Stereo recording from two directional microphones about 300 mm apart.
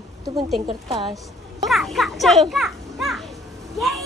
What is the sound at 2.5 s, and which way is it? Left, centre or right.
Children playing, centre.